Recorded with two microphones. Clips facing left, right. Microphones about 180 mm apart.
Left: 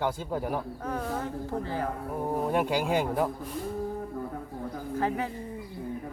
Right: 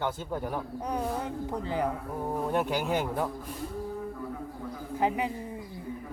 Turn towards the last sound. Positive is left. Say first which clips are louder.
# right 1 dB
turn(degrees=-15)  # may be behind; listen again after turning